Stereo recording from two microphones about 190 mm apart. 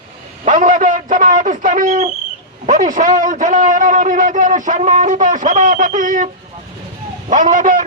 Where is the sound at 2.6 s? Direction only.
45° right (ahead or behind).